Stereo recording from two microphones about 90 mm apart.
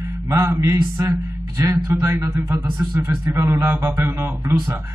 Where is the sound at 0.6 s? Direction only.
35° right (ahead or behind).